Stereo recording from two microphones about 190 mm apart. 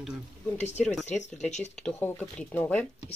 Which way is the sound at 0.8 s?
Centre (ahead or behind).